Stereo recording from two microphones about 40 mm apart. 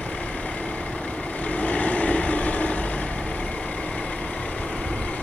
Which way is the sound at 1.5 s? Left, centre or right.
Left.